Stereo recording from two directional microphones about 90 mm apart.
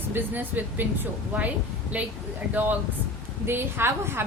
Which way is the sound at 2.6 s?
20° right (ahead or behind).